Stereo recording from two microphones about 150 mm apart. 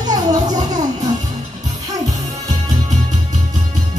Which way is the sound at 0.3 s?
25° right (ahead or behind).